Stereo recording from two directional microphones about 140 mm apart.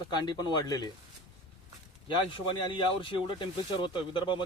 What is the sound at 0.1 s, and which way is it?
Speech, 30° left (ahead or behind).